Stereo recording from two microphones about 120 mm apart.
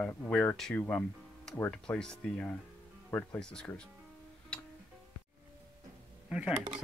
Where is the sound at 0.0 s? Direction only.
15° left (ahead or behind).